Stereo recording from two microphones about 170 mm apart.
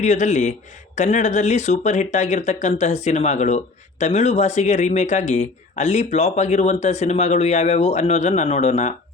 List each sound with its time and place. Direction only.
0.0 s speech: 45° left (ahead or behind)